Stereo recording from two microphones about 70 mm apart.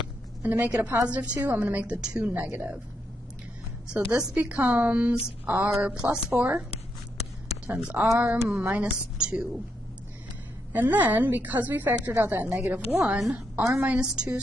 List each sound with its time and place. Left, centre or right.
0.4 s a woman's voice: right
3.9 s a woman's voice: centre
7.6 s a woman's voice: centre
10.7 s a woman's voice: right
13.7 s a woman's voice: centre